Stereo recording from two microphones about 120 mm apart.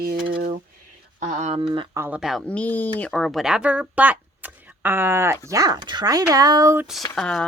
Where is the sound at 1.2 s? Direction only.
75° right (ahead or behind).